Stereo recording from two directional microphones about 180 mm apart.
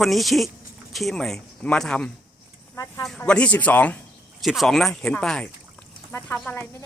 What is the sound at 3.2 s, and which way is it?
Speech, 5° left (ahead or behind).